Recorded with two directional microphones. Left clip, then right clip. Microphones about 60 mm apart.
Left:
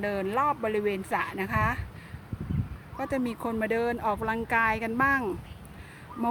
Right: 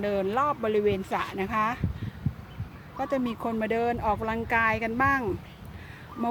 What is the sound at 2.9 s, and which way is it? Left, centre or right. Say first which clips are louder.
Speech: right 2 dB; left.